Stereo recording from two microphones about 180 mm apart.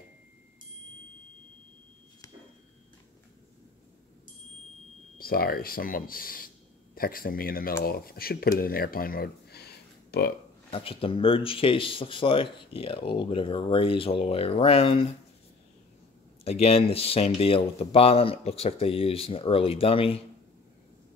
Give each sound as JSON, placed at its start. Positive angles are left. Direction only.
{"t": 5.2, "sound": "speech", "side_deg": 55}
{"t": 10.7, "sound": "speech", "side_deg": 30}
{"t": 16.4, "sound": "speech", "side_deg": 35}